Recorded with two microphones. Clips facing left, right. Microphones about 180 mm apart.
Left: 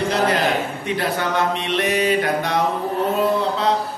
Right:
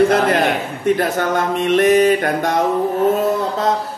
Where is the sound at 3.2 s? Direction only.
45° right (ahead or behind).